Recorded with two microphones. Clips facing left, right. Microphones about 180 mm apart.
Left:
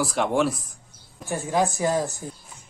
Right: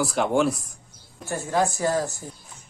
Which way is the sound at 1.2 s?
15° left (ahead or behind).